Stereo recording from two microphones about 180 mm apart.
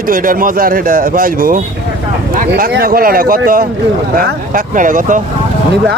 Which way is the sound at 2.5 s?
65° right (ahead or behind).